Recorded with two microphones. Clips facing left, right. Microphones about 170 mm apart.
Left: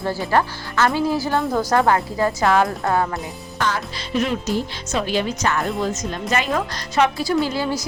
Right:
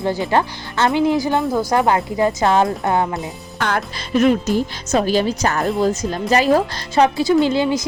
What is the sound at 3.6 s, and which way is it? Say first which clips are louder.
A woman's voice: right 2 dB; 55° right (ahead or behind).